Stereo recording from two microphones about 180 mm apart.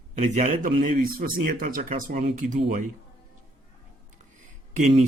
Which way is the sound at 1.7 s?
50° right (ahead or behind).